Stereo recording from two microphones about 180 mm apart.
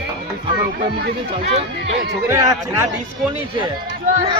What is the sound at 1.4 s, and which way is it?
Speech, 35° right (ahead or behind).